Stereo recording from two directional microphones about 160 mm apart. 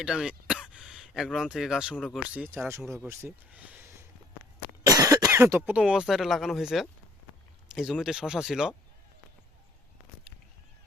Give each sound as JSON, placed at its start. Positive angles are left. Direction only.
{"t": 0.0, "sound": "speech", "side_deg": -5}
{"t": 2.5, "sound": "speech", "side_deg": -15}
{"t": 10.3, "sound": "a sound", "side_deg": 90}